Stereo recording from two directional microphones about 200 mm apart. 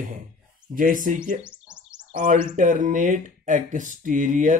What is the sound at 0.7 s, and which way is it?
Speech, 45° right (ahead or behind).